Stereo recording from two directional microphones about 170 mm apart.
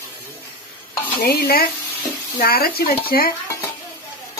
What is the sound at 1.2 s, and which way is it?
Speech, 65° left (ahead or behind).